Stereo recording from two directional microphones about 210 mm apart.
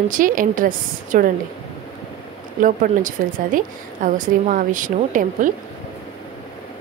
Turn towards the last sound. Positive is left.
turn(degrees=-40)  # may be behind; listen again after turning